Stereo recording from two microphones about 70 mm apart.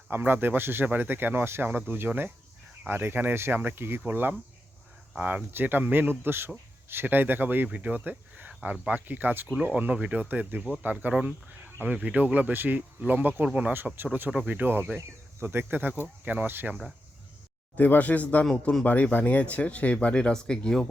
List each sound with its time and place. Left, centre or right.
0.1 s speech: right
13.9 s speech: right
17.7 s speech: left; by 20.8 s centre